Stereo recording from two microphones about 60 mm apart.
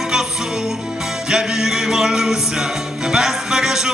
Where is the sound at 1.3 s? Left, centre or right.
Centre.